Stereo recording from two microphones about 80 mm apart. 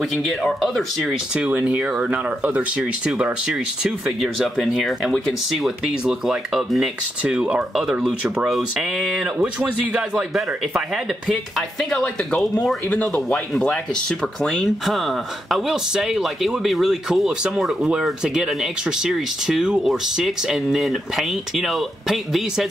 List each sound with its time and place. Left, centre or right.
0.0 s speech: centre
1.3 s speech: centre
7.3 s speech: centre
8.5 s speech: centre
11.8 s speech: centre
13.1 s speech: centre